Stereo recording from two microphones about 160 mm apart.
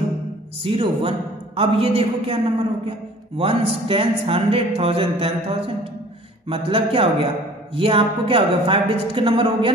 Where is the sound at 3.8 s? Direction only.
35° right (ahead or behind).